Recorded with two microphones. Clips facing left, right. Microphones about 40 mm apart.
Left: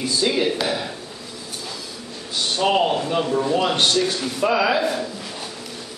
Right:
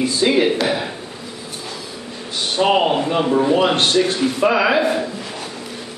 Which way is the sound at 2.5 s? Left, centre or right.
Right.